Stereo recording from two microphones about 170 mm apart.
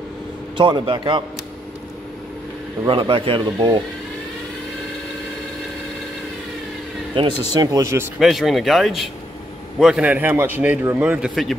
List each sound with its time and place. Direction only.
0.6 s speech: 30° right (ahead or behind)
2.8 s speech: 30° right (ahead or behind)
7.2 s speech: 25° right (ahead or behind)
8.2 s a man's voice: centre (ahead or behind)